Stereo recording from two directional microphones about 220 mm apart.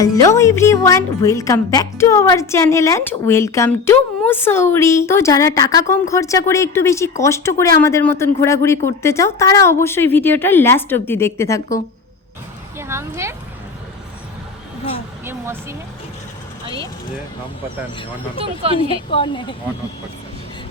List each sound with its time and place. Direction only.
0.0 s a woman's voice: 15° left (ahead or behind)
12.9 s speech: 10° right (ahead or behind)
15.2 s a sound: 10° right (ahead or behind)
18.3 s speech: 25° right (ahead or behind)
19.1 s speech: 20° left (ahead or behind)